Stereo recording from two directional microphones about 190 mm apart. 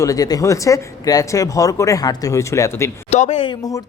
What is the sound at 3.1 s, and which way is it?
Speech, 35° left (ahead or behind).